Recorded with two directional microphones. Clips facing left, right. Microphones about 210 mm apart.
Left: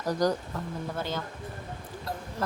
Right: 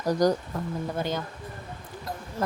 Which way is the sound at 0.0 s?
15° right (ahead or behind).